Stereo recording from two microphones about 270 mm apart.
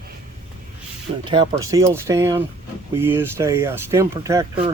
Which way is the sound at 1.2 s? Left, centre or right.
Centre.